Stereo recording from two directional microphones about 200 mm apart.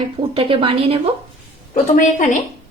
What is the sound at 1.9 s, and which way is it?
Speech, 40° left (ahead or behind).